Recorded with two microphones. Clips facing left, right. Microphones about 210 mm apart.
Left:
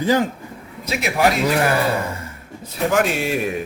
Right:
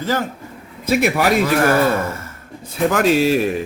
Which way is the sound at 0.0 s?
15° left (ahead or behind).